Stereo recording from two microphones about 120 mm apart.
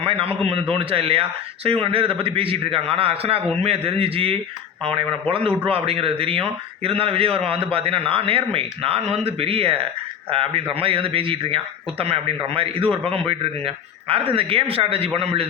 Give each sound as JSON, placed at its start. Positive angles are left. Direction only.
{"t": 0.0, "sound": "a man's voice", "side_deg": -50}